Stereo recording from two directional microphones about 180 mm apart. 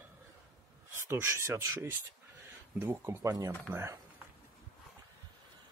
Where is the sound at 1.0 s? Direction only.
15° right (ahead or behind).